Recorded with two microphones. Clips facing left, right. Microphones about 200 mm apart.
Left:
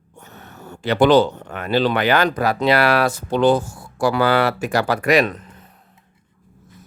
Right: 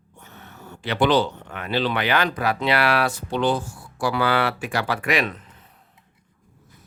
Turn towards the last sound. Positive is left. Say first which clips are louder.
# left 7 dB
turn(degrees=40)  # may be behind; listen again after turning